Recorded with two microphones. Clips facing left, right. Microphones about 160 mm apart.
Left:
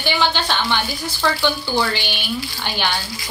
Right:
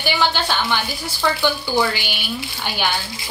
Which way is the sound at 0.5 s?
5° right (ahead or behind).